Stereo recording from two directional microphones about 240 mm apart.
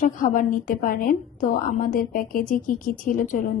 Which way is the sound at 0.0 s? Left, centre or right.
Left.